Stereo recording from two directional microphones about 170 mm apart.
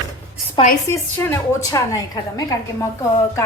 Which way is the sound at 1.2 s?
15° left (ahead or behind).